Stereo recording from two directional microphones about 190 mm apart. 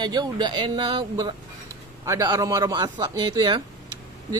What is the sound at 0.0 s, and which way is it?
A man's voice, 20° right (ahead or behind).